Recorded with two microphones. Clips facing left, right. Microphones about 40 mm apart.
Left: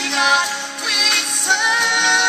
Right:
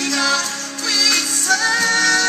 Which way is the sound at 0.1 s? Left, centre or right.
Centre.